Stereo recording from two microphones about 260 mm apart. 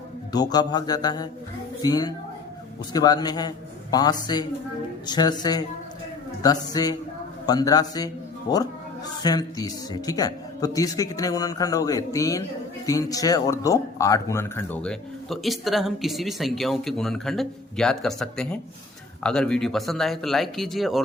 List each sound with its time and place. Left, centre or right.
0.3 s a woman's voice: centre